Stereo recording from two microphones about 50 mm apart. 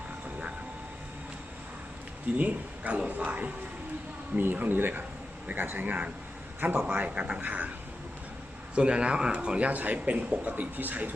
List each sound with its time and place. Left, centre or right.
2.4 s speech: right
5.8 s speech: right
8.7 s speech: right